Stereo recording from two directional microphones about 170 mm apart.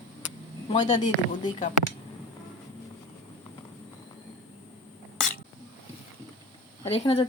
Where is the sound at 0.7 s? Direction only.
45° left (ahead or behind).